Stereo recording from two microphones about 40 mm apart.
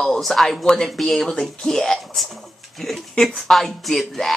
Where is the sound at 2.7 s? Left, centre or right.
Centre.